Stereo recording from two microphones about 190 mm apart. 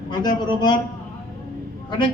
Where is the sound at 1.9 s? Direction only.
25° left (ahead or behind).